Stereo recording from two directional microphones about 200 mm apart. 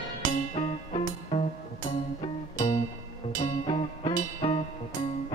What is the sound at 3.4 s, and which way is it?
Music, 25° left (ahead or behind).